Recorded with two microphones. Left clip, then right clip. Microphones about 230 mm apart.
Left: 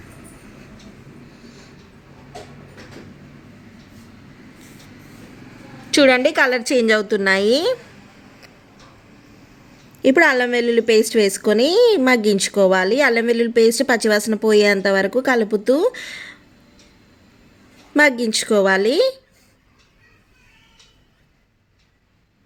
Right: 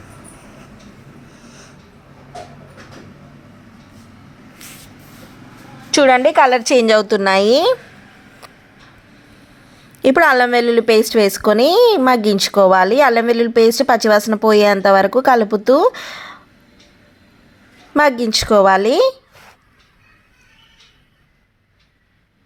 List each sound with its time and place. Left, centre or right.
1.4 s vehicle: left
5.9 s speech: centre
10.0 s speech: right
17.9 s speech: centre